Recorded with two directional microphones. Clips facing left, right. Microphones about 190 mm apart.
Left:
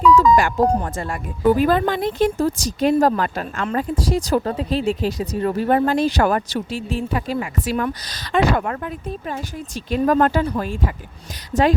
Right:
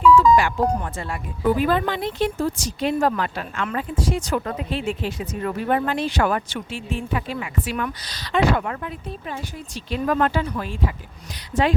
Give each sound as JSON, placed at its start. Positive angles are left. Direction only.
{"t": 0.2, "sound": "music", "side_deg": 45}
{"t": 0.7, "sound": "speech", "side_deg": 40}